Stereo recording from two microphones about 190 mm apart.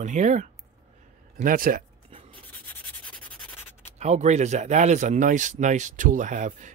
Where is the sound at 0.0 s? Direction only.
40° right (ahead or behind).